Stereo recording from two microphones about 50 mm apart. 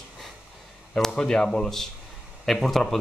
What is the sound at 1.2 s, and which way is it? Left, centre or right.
Speech, centre.